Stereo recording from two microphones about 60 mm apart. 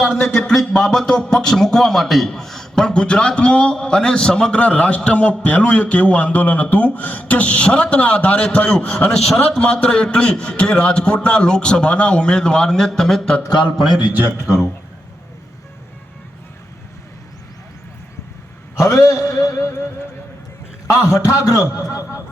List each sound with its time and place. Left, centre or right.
0.3 s a man's voice: centre
14.0 s a man's voice: right
18.8 s a man's voice: left
20.8 s a man's voice: left